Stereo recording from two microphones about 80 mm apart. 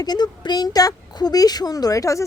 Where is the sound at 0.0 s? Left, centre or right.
Left.